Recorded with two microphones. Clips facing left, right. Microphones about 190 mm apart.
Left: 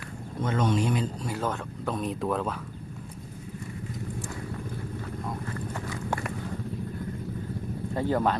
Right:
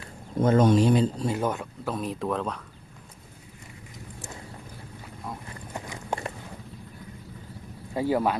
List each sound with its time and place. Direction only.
0.4 s speech: 40° right (ahead or behind)
1.4 s speech: 10° right (ahead or behind)
5.5 s clip-clop: 15° right (ahead or behind)
7.9 s speech: 10° right (ahead or behind)